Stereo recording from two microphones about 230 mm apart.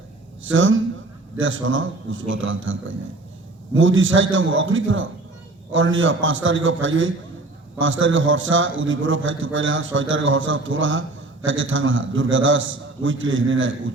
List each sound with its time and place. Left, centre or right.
0.4 s a man's voice: right